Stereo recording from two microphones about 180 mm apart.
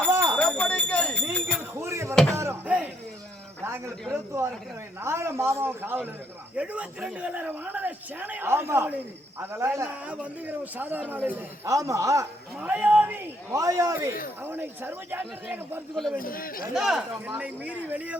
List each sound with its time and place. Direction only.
0.3 s jingle bell: 5° left (ahead or behind)
1.8 s a sound: 15° right (ahead or behind)
2.3 s music: 15° right (ahead or behind)
4.1 s a man's voice: 15° right (ahead or behind)
16.1 s speech: 50° left (ahead or behind)
16.7 s a man's voice: 5° right (ahead or behind)